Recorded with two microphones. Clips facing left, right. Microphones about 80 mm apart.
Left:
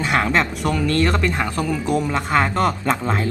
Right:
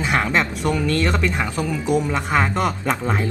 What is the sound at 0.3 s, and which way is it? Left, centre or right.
Speech, centre.